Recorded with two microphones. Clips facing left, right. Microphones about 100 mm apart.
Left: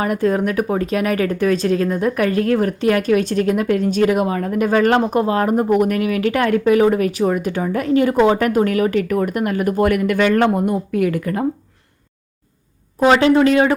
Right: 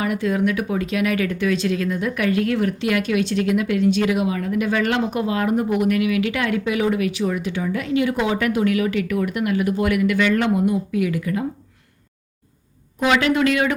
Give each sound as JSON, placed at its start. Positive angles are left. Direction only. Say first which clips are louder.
{"t": 0.0, "sound": "speech", "louder": "left 3 dB", "side_deg": 45}
{"t": 13.0, "sound": "speech", "louder": "left 6 dB", "side_deg": 35}